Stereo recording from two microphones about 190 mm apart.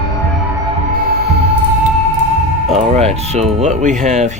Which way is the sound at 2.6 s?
30° right (ahead or behind).